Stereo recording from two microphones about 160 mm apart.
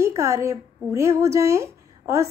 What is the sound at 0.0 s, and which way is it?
A woman's voice, 20° right (ahead or behind).